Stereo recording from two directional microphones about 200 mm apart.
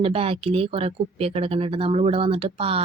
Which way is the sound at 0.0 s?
30° right (ahead or behind).